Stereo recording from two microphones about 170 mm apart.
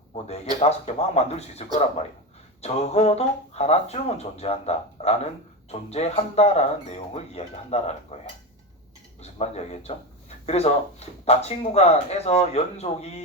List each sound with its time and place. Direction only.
0.1 s speech: 35° left (ahead or behind)
9.2 s speech: 35° left (ahead or behind)